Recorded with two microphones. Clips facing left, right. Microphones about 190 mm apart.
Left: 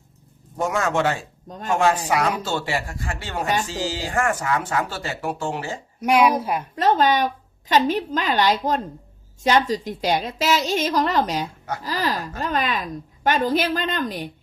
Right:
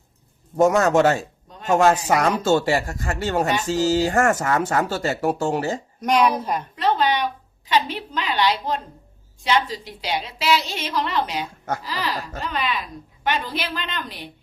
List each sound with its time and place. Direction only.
0.5 s speech: 45° right (ahead or behind)
6.0 s a woman's voice: 10° left (ahead or behind)
6.7 s a woman's voice: 45° left (ahead or behind)